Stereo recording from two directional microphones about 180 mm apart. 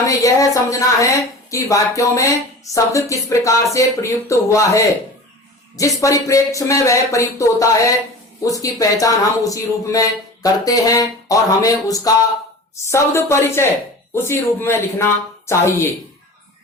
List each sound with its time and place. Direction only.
0.1 s a woman's voice: 20° left (ahead or behind)